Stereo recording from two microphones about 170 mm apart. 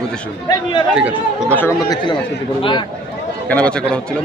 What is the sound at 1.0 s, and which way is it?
Speech, 5° right (ahead or behind).